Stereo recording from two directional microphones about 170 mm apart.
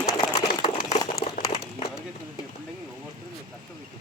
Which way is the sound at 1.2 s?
40° left (ahead or behind).